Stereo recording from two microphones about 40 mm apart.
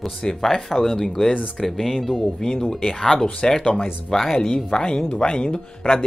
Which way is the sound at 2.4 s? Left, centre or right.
Centre.